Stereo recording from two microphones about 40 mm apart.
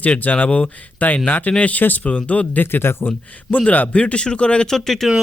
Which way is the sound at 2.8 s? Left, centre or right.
Left.